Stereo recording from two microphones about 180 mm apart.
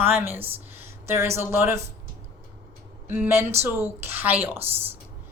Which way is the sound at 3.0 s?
10° right (ahead or behind).